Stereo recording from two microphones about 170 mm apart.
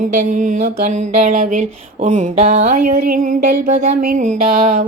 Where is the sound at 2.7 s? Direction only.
65° right (ahead or behind); by 4.5 s 45° right (ahead or behind).